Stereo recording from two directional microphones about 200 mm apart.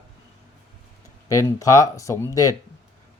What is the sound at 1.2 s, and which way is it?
Speech, 15° left (ahead or behind).